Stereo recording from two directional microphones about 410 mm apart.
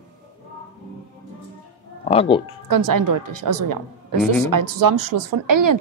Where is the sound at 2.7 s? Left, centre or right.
Right.